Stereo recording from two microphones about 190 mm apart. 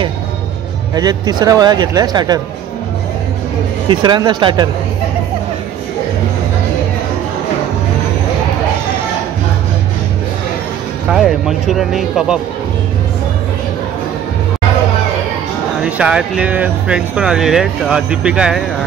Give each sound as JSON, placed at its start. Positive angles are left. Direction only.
{"t": 0.9, "sound": "speech", "side_deg": -20}
{"t": 3.9, "sound": "speech", "side_deg": -25}
{"t": 11.1, "sound": "speech", "side_deg": 0}
{"t": 15.8, "sound": "speech", "side_deg": -5}